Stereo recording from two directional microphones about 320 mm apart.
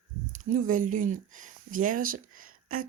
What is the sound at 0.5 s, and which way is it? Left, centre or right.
Speech, right.